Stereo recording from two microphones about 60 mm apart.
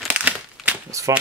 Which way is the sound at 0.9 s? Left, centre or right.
Right.